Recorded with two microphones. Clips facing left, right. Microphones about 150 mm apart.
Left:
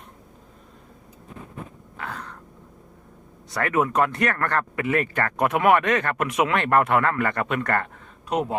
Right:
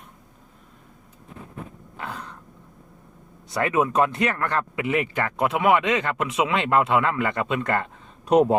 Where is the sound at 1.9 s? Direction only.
20° right (ahead or behind).